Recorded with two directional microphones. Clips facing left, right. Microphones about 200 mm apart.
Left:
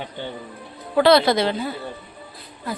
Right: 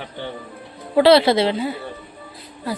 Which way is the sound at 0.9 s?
30° right (ahead or behind).